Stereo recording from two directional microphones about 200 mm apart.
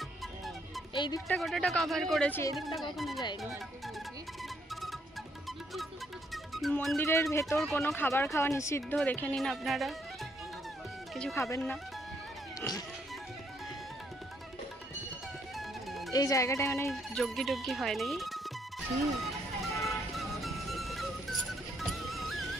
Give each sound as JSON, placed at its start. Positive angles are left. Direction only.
{"t": 0.9, "sound": "speech", "side_deg": 25}
{"t": 1.3, "sound": "speech", "side_deg": 5}
{"t": 6.3, "sound": "music", "side_deg": 0}
{"t": 7.0, "sound": "speech", "side_deg": 15}
{"t": 11.5, "sound": "speech", "side_deg": 10}
{"t": 12.5, "sound": "music", "side_deg": 20}
{"t": 15.5, "sound": "music", "side_deg": 0}
{"t": 16.1, "sound": "speech", "side_deg": 15}
{"t": 16.9, "sound": "speech", "side_deg": 0}
{"t": 19.8, "sound": "music", "side_deg": 0}